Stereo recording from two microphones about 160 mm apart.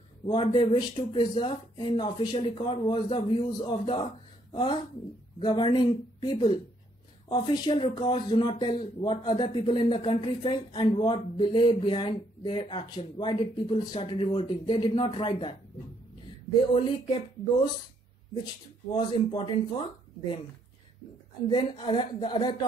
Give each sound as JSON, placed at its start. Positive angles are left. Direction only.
{"t": 0.3, "sound": "speech", "side_deg": 30}
{"t": 16.7, "sound": "speech", "side_deg": 30}
{"t": 18.9, "sound": "speech", "side_deg": 30}
{"t": 21.5, "sound": "speech", "side_deg": 30}